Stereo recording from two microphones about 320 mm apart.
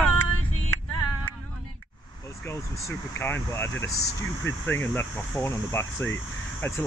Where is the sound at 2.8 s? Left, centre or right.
Centre.